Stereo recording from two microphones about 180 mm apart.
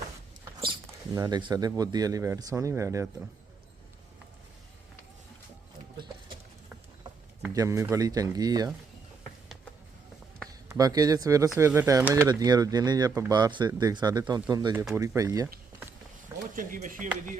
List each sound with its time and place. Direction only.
0.6 s speech: 25° right (ahead or behind)
7.4 s speech: 15° right (ahead or behind)
10.7 s speech: 20° right (ahead or behind)
16.6 s speech: 50° right (ahead or behind)